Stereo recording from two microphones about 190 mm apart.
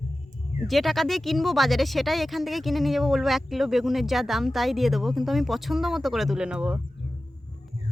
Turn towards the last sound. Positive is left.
turn(degrees=-5)  # may be behind; listen again after turning